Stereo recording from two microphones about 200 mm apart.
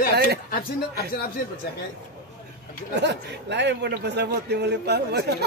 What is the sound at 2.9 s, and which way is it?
A man's voice, 60° right (ahead or behind).